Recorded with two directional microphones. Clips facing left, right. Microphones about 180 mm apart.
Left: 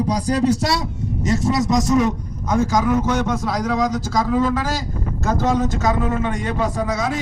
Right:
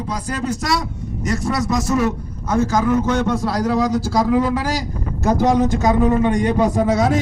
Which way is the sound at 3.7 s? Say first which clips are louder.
Right 3 dB; 10° right (ahead or behind).